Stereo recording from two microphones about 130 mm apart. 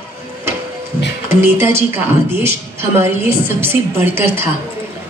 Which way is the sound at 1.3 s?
20° right (ahead or behind).